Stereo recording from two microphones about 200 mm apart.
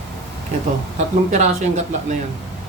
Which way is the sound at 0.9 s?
35° right (ahead or behind).